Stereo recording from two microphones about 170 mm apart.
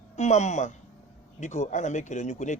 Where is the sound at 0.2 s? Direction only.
45° left (ahead or behind).